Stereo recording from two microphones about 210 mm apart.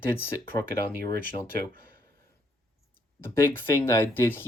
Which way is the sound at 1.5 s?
45° right (ahead or behind).